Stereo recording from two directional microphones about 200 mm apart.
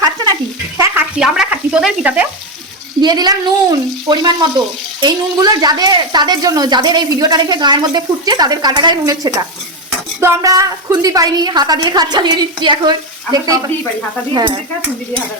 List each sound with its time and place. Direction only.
0.8 s speech: 5° right (ahead or behind)
3.0 s speech: 20° right (ahead or behind)